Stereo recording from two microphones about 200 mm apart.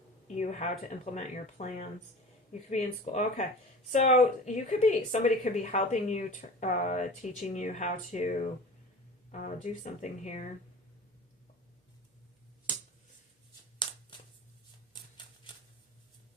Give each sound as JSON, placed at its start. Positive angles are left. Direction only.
{"t": 0.3, "sound": "speech", "side_deg": 35}
{"t": 14.9, "sound": "typewriter", "side_deg": 20}